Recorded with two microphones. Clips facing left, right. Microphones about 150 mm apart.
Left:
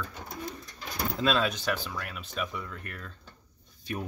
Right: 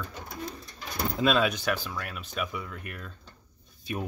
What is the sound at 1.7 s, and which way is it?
Speech, centre (ahead or behind).